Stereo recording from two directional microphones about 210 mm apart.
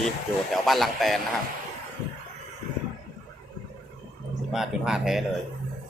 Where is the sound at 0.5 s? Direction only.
Centre (ahead or behind).